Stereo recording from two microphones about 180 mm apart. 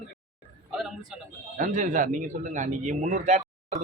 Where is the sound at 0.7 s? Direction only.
5° right (ahead or behind).